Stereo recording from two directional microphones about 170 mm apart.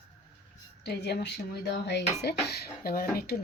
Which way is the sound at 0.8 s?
75° left (ahead or behind).